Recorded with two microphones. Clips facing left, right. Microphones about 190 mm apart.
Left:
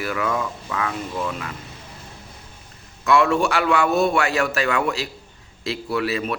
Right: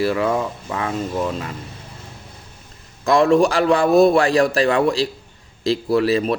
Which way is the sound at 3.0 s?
35° right (ahead or behind).